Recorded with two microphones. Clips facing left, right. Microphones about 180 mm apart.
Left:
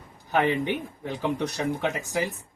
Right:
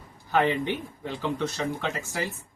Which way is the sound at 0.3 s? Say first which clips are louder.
Even; 15° left (ahead or behind).